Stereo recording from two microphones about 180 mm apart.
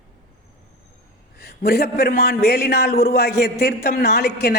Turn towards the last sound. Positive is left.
turn(degrees=60)  # may be behind; listen again after turning